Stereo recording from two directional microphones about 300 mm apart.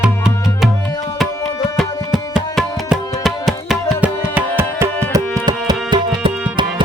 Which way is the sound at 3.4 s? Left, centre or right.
Centre.